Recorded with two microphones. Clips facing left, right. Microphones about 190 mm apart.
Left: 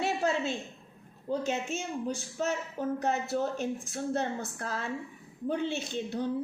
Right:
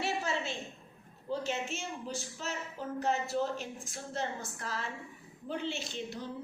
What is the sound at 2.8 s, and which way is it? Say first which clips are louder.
Speech: left 9 dB; 60° left (ahead or behind).